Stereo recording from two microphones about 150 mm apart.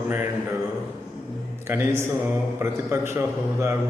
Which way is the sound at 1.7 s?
15° right (ahead or behind).